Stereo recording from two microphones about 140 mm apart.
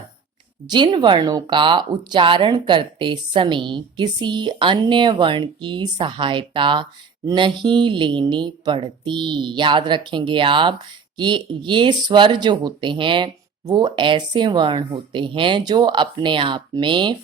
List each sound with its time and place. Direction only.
0.7 s speech: 30° right (ahead or behind)